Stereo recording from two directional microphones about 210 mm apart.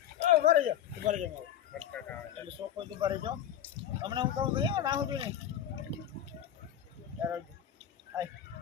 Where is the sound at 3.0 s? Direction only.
25° right (ahead or behind).